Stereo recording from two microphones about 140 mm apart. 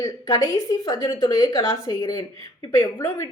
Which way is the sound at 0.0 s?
25° left (ahead or behind).